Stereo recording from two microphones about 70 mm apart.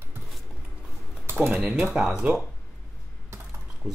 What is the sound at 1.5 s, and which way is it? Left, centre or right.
Speech, centre.